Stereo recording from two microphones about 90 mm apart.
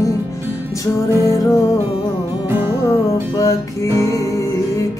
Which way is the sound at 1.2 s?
40° left (ahead or behind).